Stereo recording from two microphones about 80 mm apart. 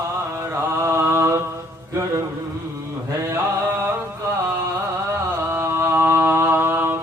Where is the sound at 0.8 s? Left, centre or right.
Right.